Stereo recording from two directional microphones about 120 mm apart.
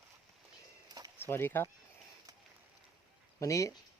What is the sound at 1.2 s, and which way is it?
Speech, 20° left (ahead or behind).